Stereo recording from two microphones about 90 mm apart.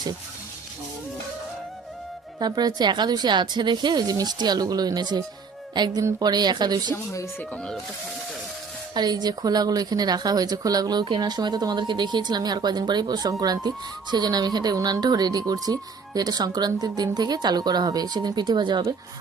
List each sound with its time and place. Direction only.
2.4 s speech: 50° right (ahead or behind)
6.0 s speech: 40° right (ahead or behind)
6.9 s speech: 35° left (ahead or behind)
9.0 s speech: 50° right (ahead or behind)